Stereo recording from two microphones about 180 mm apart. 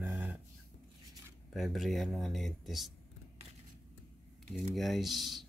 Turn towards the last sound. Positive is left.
turn(degrees=0)  # may be behind; listen again after turning